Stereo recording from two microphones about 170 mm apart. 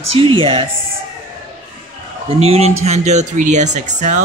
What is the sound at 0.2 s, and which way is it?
Speech, 30° right (ahead or behind).